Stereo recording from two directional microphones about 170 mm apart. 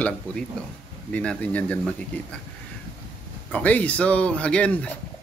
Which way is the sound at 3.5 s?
10° left (ahead or behind).